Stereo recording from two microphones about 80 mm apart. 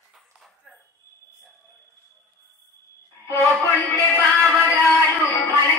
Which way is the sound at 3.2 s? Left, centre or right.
Left.